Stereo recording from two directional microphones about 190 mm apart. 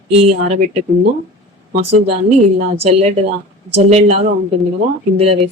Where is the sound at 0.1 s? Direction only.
35° right (ahead or behind).